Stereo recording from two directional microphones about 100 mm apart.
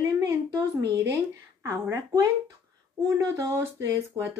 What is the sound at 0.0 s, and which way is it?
A woman's voice, 30° right (ahead or behind).